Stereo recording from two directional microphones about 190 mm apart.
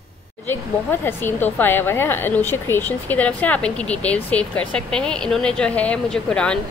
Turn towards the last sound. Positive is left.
turn(degrees=5)  # may be behind; listen again after turning